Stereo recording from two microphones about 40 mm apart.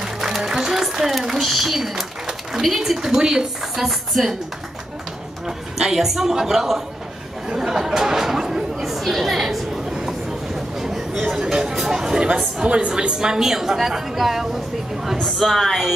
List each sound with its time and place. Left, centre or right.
0.0 s music: centre
1.0 s a woman's voice: centre
5.8 s a woman's voice: centre
7.4 s chatter: centre
10.5 s a sound: centre
11.3 s a woman's voice: centre
12.6 s a woman's voice: right; by 14.6 s centre
15.2 s a woman's voice: centre